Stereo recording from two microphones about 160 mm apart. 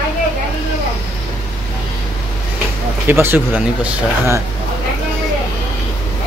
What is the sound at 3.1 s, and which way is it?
Speech, 15° right (ahead or behind).